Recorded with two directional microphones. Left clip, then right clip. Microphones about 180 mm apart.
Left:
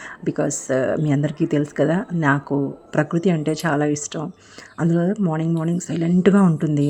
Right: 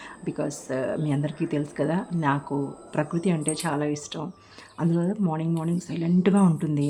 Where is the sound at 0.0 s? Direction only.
30° left (ahead or behind).